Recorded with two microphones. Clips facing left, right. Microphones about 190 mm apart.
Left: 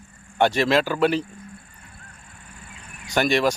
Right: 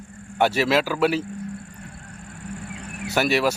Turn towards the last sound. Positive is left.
turn(degrees=-5)  # may be behind; listen again after turning